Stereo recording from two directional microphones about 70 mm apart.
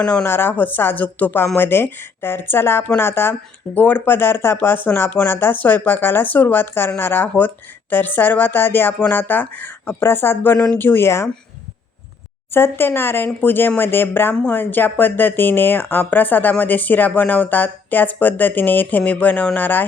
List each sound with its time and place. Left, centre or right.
0.0 s speech: centre
0.3 s speech: left
12.5 s speech: left